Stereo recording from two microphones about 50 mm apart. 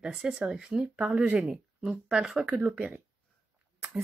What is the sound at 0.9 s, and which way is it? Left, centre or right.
Speech, right.